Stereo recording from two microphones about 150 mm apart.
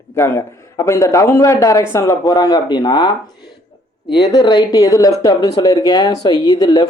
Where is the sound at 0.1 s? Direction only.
20° left (ahead or behind).